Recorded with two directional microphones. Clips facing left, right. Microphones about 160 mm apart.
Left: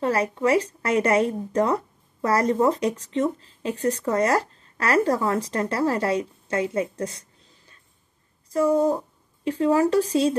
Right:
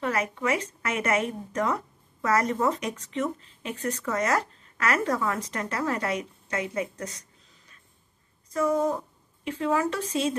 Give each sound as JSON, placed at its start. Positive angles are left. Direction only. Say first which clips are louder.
{"t": 0.0, "sound": "a woman's voice", "louder": "left 6 dB", "side_deg": 35}